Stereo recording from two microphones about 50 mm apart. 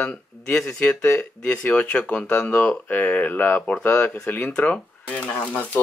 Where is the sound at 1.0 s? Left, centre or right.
Left.